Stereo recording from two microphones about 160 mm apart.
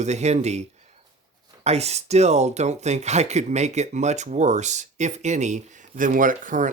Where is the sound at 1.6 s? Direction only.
40° right (ahead or behind).